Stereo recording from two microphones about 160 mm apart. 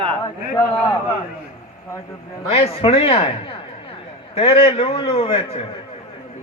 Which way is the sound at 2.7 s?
35° left (ahead or behind).